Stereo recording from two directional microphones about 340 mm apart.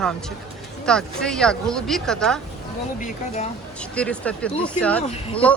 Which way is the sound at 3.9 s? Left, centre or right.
Centre.